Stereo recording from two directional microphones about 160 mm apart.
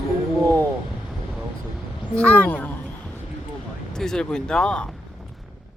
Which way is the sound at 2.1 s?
10° left (ahead or behind).